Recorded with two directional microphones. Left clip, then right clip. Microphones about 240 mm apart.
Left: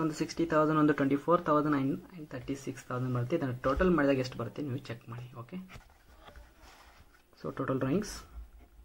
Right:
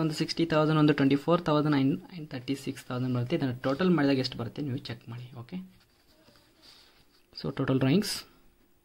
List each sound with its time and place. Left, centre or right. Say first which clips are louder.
0.0 s speech: right 3 dB; right
7.4 s speech: right 4 dB; right